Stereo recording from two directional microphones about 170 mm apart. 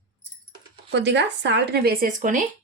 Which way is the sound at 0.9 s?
90° right.